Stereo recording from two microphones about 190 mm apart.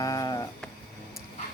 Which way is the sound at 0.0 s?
20° left (ahead or behind).